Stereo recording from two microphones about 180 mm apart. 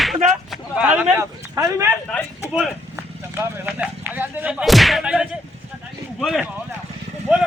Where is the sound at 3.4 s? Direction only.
10° right (ahead or behind).